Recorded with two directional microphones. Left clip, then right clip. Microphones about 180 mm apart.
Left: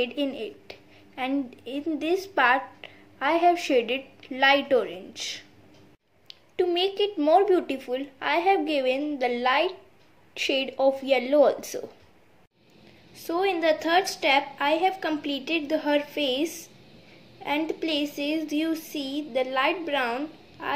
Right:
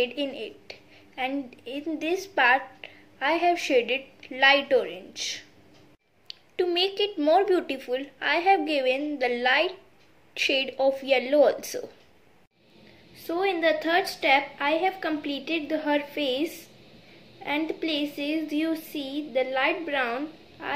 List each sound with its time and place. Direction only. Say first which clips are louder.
0.0 s a woman's voice: even; 20° left (ahead or behind)
13.3 s speech: left 1 dB; 10° left (ahead or behind)